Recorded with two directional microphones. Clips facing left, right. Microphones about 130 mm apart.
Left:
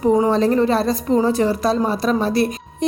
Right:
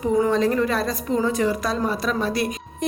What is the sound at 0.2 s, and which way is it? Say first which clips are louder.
A woman's voice: left 3 dB; 30° left (ahead or behind).